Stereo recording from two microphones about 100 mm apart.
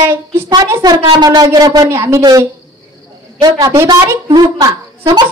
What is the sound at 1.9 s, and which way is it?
Speech, 30° right (ahead or behind).